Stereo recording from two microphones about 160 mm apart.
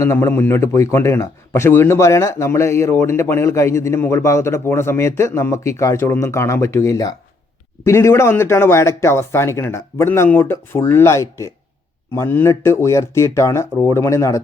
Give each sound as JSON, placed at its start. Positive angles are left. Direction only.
{"t": 0.0, "sound": "a man's voice", "side_deg": 15}